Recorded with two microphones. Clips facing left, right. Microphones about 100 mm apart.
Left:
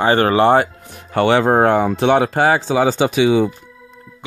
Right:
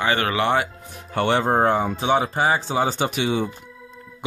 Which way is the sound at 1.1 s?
90° left.